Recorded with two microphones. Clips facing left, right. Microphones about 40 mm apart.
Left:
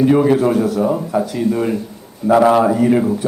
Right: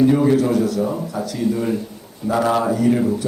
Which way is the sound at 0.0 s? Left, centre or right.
Left.